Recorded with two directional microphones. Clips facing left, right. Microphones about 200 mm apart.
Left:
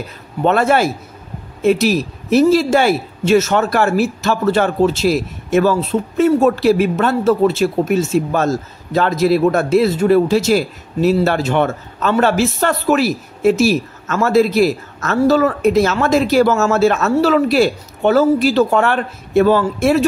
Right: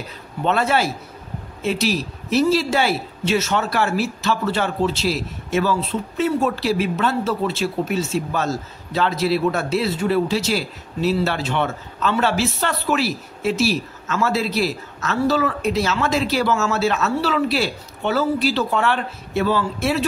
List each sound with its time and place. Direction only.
0.4 s speech: 50° left (ahead or behind)